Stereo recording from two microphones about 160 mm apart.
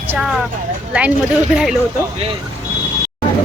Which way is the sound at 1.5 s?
5° right (ahead or behind).